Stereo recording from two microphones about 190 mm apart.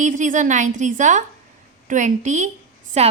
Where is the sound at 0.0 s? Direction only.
40° right (ahead or behind).